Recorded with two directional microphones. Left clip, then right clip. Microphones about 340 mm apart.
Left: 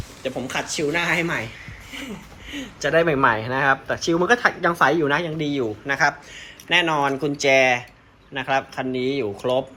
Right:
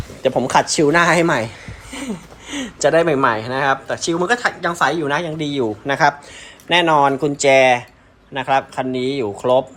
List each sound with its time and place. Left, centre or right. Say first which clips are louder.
0.2 s speech: right 11 dB; right
2.8 s speech: right 4 dB; centre